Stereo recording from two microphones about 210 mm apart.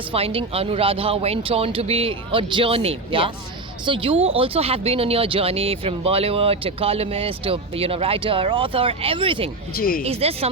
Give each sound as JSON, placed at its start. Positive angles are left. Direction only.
{"t": 0.1, "sound": "speech", "side_deg": -25}
{"t": 9.7, "sound": "speech", "side_deg": 40}
{"t": 10.1, "sound": "speech", "side_deg": -30}